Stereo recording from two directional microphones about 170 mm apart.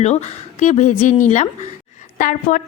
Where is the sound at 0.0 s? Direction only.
40° left (ahead or behind).